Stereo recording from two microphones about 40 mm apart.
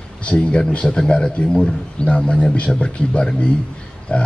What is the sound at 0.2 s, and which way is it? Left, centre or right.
A man's voice, left.